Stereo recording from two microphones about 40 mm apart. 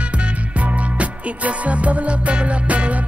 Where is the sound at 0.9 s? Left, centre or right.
Right.